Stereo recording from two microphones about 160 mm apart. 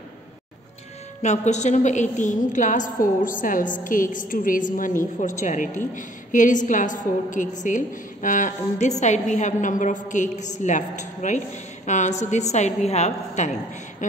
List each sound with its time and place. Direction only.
1.2 s a woman's voice: 45° left (ahead or behind)